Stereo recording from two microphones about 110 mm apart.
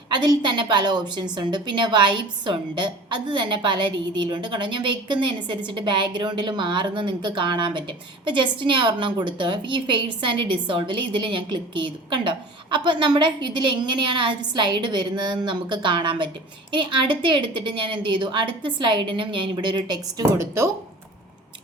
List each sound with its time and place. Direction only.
0.1 s a woman's voice: 45° right (ahead or behind)